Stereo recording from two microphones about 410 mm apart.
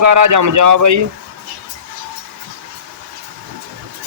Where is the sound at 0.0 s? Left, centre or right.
Right.